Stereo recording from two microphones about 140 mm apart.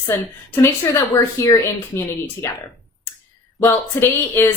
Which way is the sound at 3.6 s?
15° left (ahead or behind).